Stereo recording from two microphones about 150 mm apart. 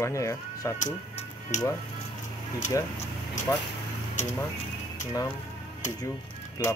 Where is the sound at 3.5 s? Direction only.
20° left (ahead or behind).